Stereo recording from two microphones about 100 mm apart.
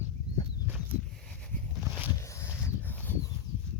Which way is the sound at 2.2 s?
30° left (ahead or behind).